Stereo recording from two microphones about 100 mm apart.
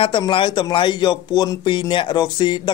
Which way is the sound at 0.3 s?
55° left (ahead or behind).